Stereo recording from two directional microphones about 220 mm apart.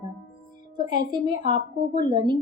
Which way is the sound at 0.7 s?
20° right (ahead or behind).